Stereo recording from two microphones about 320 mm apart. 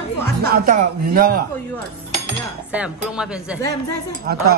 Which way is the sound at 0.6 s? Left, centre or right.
Right.